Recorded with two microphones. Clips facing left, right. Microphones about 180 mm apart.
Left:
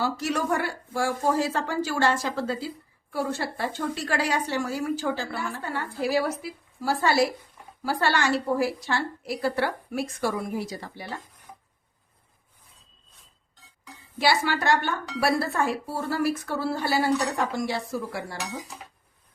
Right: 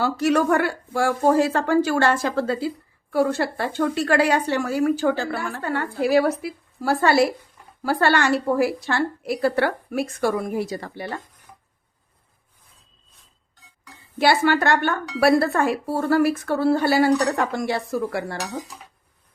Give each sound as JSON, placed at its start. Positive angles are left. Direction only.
{"t": 0.0, "sound": "speech", "side_deg": -60}
{"t": 14.2, "sound": "speech", "side_deg": -55}